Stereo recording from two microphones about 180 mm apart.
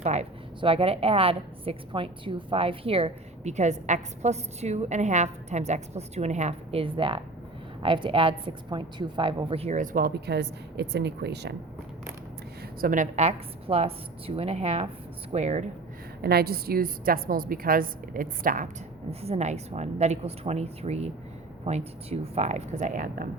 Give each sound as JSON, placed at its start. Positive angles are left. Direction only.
{"t": 0.0, "sound": "a woman's voice", "side_deg": -35}
{"t": 12.8, "sound": "a woman's voice", "side_deg": -45}
{"t": 16.2, "sound": "a woman's voice", "side_deg": -60}
{"t": 19.2, "sound": "a woman's voice", "side_deg": -35}